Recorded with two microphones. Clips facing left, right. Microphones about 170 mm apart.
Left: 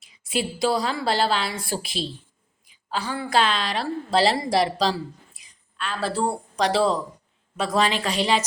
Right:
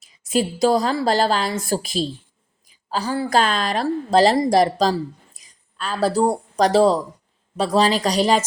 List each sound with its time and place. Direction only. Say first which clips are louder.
0.0 s a woman's voice: right 6 dB; 40° right (ahead or behind)